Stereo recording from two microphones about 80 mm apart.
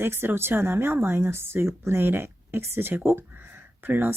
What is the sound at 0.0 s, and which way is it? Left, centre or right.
Speech, right.